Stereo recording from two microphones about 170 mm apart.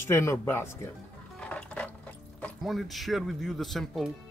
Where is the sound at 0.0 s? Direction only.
15° left (ahead or behind).